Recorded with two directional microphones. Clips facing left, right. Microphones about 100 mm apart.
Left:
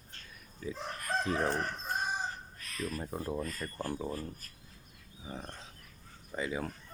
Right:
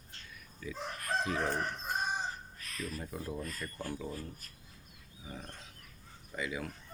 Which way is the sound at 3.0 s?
35° left (ahead or behind).